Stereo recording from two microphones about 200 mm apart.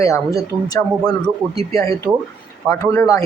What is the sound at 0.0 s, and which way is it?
Speech, 15° left (ahead or behind).